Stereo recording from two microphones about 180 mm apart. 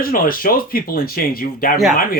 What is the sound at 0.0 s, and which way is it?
Speech, 55° left (ahead or behind).